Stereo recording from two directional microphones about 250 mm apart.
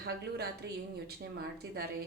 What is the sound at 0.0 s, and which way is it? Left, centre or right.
Speech, right.